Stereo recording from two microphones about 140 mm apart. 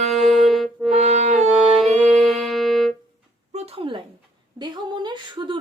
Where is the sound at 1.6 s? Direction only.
Centre (ahead or behind).